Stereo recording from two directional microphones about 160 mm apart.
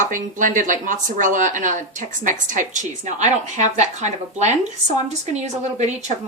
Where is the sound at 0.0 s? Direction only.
55° right (ahead or behind).